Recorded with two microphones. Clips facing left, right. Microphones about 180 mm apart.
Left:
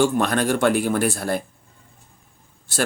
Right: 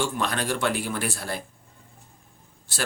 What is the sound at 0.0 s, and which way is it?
Speech, 50° left (ahead or behind).